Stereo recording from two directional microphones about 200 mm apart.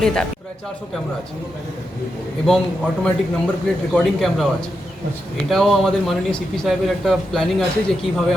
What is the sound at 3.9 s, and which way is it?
Speech, centre (ahead or behind).